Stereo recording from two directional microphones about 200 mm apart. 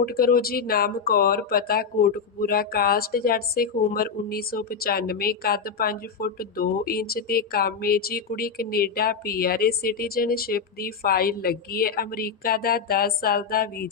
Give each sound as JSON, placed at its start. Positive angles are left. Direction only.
{"t": 0.0, "sound": "speech", "side_deg": 50}